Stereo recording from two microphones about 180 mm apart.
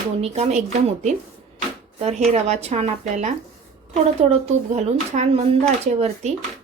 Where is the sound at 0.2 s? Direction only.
35° right (ahead or behind).